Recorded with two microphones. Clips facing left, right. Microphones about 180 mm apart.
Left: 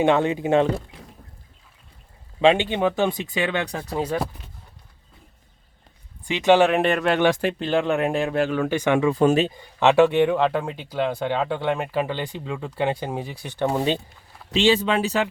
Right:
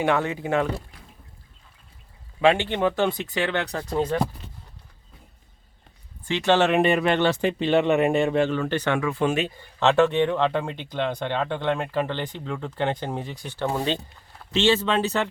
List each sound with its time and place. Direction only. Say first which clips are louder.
0.0 s speech: left 4 dB; 25° left (ahead or behind)
2.4 s speech: left 2 dB; 20° left (ahead or behind)
6.2 s speech: left 4 dB; 15° left (ahead or behind)
6.7 s speech: even; centre (ahead or behind)
7.2 s speech: left 2 dB; 15° left (ahead or behind)
7.6 s speech: right 4 dB; centre (ahead or behind)
9.1 s speech: left 5 dB; 35° left (ahead or behind)
9.6 s speech: even; 15° left (ahead or behind)